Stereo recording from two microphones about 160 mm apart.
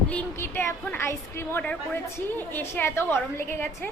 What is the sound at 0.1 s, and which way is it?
A woman's voice, 10° left (ahead or behind).